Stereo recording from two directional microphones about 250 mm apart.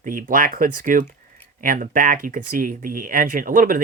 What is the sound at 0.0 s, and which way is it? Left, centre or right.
Speech, right.